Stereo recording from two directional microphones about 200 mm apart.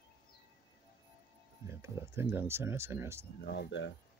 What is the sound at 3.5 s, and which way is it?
Speech, 60° left (ahead or behind).